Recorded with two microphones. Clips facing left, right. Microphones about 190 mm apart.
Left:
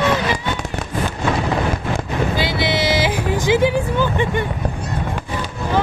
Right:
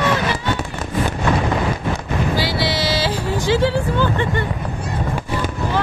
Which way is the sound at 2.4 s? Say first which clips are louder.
Left 1 dB; 20° left (ahead or behind).